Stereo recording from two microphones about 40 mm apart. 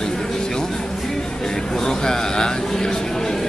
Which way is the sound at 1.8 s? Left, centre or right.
Centre.